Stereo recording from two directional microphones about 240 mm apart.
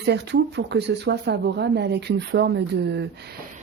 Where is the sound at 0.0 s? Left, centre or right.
Right.